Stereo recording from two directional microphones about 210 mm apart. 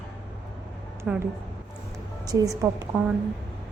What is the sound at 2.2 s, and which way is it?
Speech, 15° right (ahead or behind).